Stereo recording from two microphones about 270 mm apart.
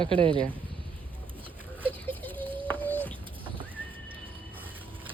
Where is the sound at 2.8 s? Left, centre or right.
Centre.